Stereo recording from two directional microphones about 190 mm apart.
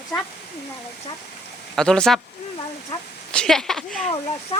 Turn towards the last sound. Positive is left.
turn(degrees=30)  # may be behind; listen again after turning